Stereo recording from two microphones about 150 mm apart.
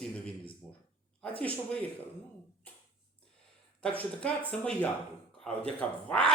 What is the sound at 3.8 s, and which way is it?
Speech, 10° left (ahead or behind).